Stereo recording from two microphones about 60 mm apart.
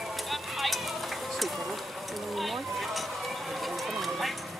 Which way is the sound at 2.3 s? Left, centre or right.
Centre.